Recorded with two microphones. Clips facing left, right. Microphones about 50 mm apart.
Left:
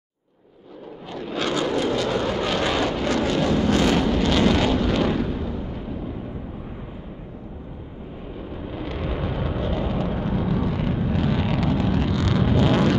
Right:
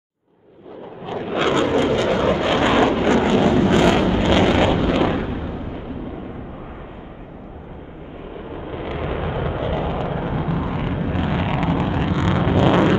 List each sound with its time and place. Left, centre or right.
1.0 s vehicle: right
8.4 s vehicle: right